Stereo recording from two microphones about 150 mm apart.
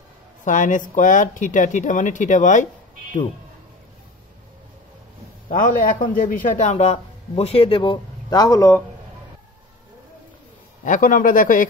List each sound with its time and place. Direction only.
0.5 s speech: 60° left (ahead or behind)
5.5 s a man's voice: 60° left (ahead or behind); by 8.8 s 20° left (ahead or behind)
10.8 s speech: 60° left (ahead or behind)